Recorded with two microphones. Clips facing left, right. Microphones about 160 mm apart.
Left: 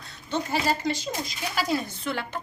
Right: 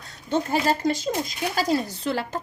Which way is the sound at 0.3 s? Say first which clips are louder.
Right 4 dB; 50° right (ahead or behind).